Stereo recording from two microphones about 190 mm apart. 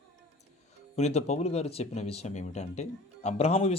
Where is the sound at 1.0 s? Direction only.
35° left (ahead or behind).